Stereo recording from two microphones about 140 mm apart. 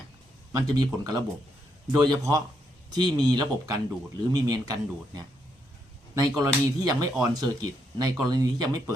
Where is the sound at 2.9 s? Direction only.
30° right (ahead or behind).